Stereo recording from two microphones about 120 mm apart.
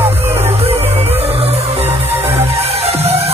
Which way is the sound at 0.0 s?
20° right (ahead or behind).